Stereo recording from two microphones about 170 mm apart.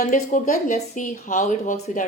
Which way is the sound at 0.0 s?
50° left (ahead or behind).